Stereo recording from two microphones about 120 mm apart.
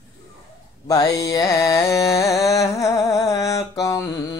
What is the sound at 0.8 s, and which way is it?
Music, 30° left (ahead or behind).